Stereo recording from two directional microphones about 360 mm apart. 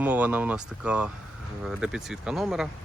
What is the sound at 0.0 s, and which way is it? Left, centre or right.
Speech, centre.